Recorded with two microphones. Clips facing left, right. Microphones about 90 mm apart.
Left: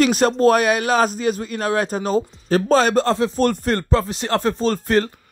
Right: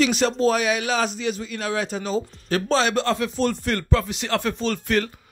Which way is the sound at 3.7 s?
35° left (ahead or behind).